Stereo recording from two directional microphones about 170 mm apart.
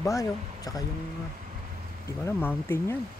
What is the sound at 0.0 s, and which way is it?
Speech, 20° left (ahead or behind).